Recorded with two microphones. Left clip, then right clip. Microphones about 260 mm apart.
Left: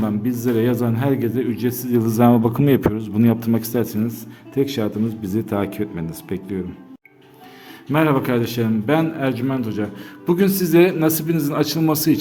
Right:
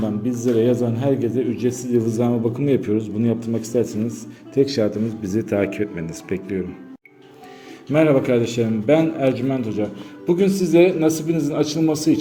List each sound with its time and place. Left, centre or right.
0.4 s a man's voice: left
7.9 s a man's voice: centre
10.7 s a man's voice: left
11.0 s a man's voice: left
11.5 s a man's voice: left
11.8 s a man's voice: left